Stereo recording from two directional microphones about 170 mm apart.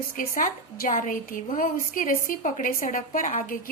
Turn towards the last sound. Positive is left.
turn(degrees=50)  # may be behind; listen again after turning